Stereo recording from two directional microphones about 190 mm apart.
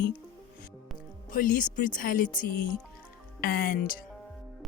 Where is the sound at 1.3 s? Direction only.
45° left (ahead or behind).